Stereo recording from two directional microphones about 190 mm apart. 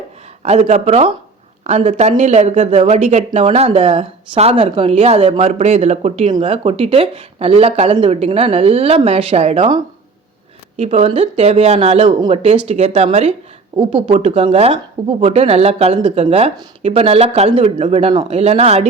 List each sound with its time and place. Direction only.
0.4 s speech: 35° right (ahead or behind)
10.8 s speech: 30° right (ahead or behind)